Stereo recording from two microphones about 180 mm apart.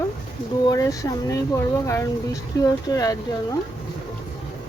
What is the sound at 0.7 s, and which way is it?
Speech, 20° left (ahead or behind).